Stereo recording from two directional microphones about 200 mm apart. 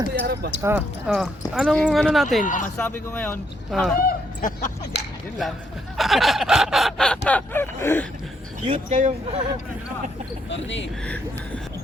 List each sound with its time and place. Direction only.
0.1 s speech: 55° right (ahead or behind)
0.6 s snicker: 10° right (ahead or behind)
2.4 s speech: 40° left (ahead or behind)
2.7 s speech: 10° left (ahead or behind)
4.4 s speech: 45° left (ahead or behind)
5.4 s snicker: centre (ahead or behind)
7.3 s speech: 10° left (ahead or behind)
8.6 s speech: 35° right (ahead or behind)
10.5 s speech: 65° left (ahead or behind)
11.0 s speech: 5° left (ahead or behind)